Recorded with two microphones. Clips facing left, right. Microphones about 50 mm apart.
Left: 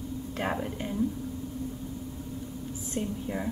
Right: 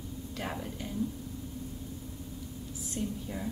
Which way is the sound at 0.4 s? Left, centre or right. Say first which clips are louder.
Left 6 dB; left.